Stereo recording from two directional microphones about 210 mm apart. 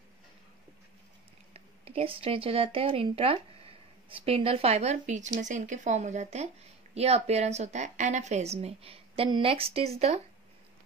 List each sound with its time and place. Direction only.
1.5 s speech: 30° right (ahead or behind)